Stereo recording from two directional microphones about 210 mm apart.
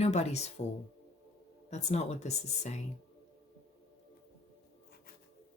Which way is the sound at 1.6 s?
30° left (ahead or behind).